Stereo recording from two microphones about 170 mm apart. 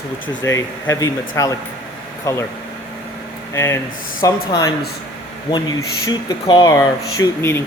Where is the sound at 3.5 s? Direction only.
15° left (ahead or behind).